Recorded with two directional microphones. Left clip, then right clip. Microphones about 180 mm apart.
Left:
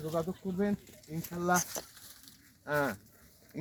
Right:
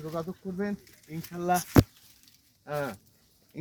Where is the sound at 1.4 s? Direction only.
25° right (ahead or behind).